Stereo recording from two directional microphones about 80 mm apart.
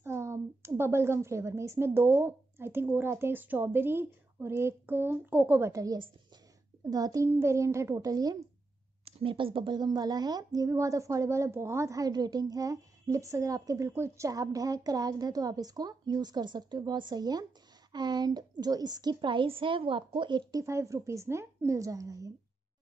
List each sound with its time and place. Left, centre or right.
0.0 s a woman's voice: right
5.6 s a woman's voice: right
7.2 s a woman's voice: right
9.2 s a woman's voice: right
10.7 s a woman's voice: right
20.6 s a woman's voice: right